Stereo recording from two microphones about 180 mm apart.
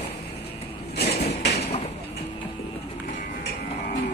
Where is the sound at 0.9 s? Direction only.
65° left (ahead or behind).